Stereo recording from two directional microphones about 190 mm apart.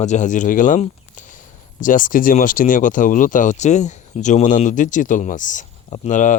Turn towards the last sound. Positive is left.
turn(degrees=40)  # may be behind; listen again after turning